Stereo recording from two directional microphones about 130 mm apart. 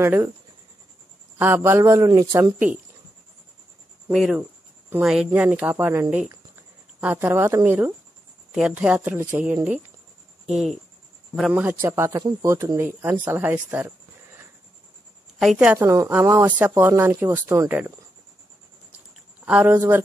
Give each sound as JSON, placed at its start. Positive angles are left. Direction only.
{"t": 0.0, "sound": "speech", "side_deg": -20}
{"t": 1.4, "sound": "speech", "side_deg": -20}
{"t": 4.1, "sound": "speech", "side_deg": 0}
{"t": 4.4, "sound": "cricket", "side_deg": -15}
{"t": 5.0, "sound": "speech", "side_deg": -5}
{"t": 10.5, "sound": "speech", "side_deg": -5}
{"t": 11.5, "sound": "speech", "side_deg": -15}
{"t": 15.3, "sound": "a woman's voice", "side_deg": -5}
{"t": 15.8, "sound": "speech", "side_deg": -20}
{"t": 19.4, "sound": "speech", "side_deg": -10}